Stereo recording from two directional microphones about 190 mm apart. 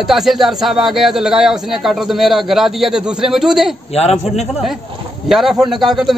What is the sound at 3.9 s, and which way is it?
Speech, 35° left (ahead or behind).